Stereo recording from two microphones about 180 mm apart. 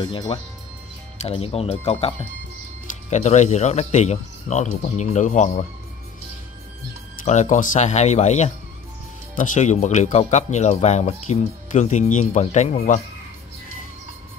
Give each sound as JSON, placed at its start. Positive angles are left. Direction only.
{"t": 0.0, "sound": "speech", "side_deg": 25}
{"t": 7.2, "sound": "speech", "side_deg": 40}